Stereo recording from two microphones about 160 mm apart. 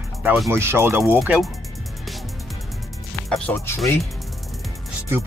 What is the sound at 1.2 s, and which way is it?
Speech, centre (ahead or behind).